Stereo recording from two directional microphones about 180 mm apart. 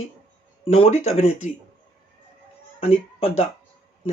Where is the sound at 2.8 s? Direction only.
35° left (ahead or behind).